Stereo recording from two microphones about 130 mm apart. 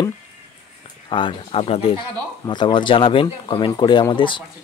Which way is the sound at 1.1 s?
40° left (ahead or behind).